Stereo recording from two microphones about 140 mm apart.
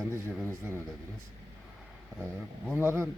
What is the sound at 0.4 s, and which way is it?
Speech, 15° right (ahead or behind).